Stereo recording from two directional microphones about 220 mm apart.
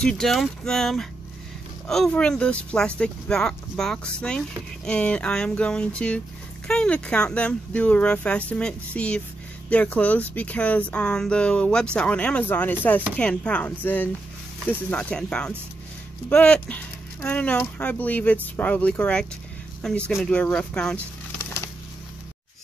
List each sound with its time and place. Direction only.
0.0 s speech: centre (ahead or behind)